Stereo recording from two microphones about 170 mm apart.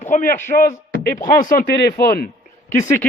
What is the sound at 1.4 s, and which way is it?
Speech, 55° left (ahead or behind).